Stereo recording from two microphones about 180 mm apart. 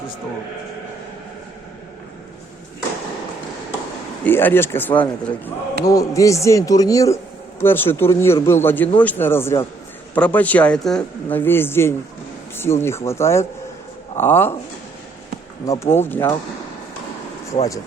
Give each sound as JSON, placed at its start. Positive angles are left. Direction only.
{"t": 4.2, "sound": "speech", "side_deg": 10}
{"t": 15.6, "sound": "speech", "side_deg": 15}